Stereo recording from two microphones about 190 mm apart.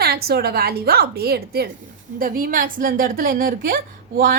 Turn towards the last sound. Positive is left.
turn(degrees=-50)  # may be behind; listen again after turning